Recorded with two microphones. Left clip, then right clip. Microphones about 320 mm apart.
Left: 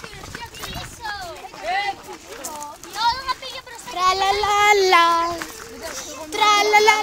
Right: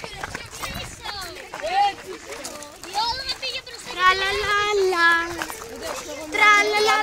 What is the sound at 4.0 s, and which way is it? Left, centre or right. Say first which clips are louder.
Child singing: left 1 dB; centre.